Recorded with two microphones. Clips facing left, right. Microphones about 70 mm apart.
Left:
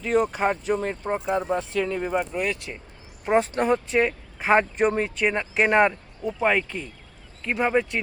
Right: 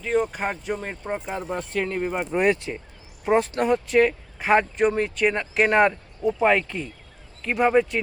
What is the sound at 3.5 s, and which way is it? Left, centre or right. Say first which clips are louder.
Speech: right 2 dB; centre.